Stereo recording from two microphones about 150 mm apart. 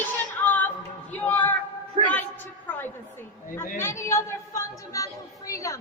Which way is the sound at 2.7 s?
15° left (ahead or behind).